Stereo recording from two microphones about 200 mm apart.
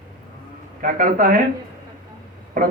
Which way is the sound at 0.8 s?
45° right (ahead or behind).